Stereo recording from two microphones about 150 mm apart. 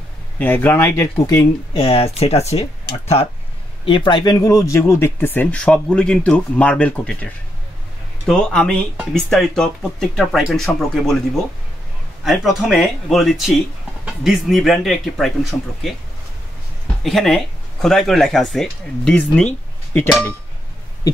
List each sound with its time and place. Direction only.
0.4 s speech: 15° left (ahead or behind); by 2.7 s 45° left (ahead or behind)
3.8 s speech: 30° left (ahead or behind); by 11.1 s centre (ahead or behind)
12.3 s speech: centre (ahead or behind)
17.0 s speech: centre (ahead or behind)